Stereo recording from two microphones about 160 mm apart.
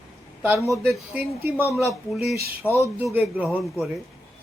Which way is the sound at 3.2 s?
10° right (ahead or behind).